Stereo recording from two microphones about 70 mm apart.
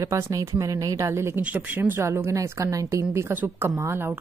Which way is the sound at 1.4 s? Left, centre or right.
Right.